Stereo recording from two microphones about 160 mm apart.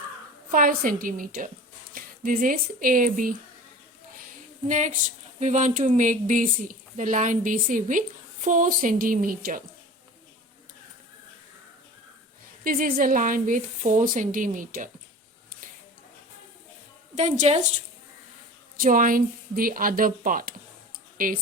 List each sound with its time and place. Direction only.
0.5 s speech: 60° right (ahead or behind)
4.7 s a woman's voice: 50° right (ahead or behind)
12.6 s speech: 60° right (ahead or behind)
17.2 s a woman's voice: 45° right (ahead or behind)
18.8 s speech: 55° right (ahead or behind)